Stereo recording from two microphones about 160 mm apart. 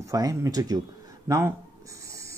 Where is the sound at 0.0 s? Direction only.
20° right (ahead or behind).